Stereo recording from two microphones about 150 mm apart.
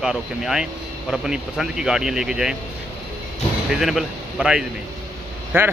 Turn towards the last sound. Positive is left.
turn(degrees=-15)  # may be behind; listen again after turning